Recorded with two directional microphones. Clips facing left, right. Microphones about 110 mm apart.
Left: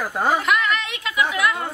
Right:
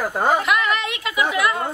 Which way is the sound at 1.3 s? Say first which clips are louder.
Right 3 dB; 35° right (ahead or behind).